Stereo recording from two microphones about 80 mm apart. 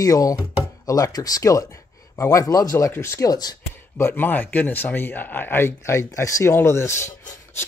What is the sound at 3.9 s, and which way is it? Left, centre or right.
Speech, left.